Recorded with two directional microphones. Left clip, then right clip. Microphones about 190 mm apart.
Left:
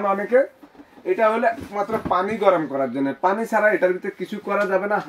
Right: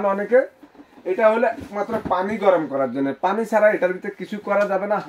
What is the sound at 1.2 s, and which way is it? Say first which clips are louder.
Speech: right 2 dB; 15° right (ahead or behind).